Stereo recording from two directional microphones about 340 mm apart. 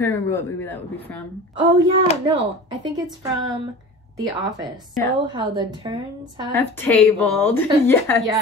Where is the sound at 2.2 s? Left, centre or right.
Centre.